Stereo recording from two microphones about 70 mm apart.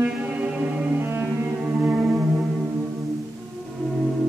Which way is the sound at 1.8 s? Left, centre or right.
Right.